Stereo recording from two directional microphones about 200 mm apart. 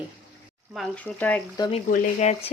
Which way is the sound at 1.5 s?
20° left (ahead or behind).